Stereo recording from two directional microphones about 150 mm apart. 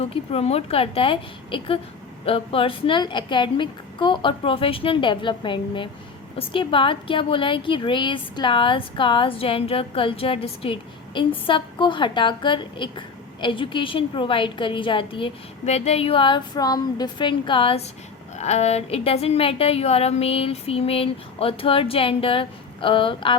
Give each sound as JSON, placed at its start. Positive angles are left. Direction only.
{"t": 0.0, "sound": "a woman's voice", "side_deg": 40}
{"t": 18.3, "sound": "a woman's voice", "side_deg": 45}